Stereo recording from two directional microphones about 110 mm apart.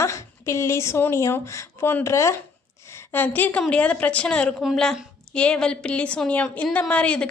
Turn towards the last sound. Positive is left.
turn(degrees=10)  # may be behind; listen again after turning